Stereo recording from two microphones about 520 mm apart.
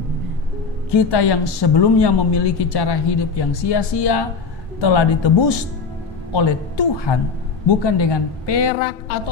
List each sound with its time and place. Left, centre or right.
0.9 s a woman's voice: left